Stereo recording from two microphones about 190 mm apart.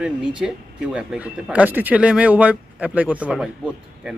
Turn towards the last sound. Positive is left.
turn(degrees=-5)  # may be behind; listen again after turning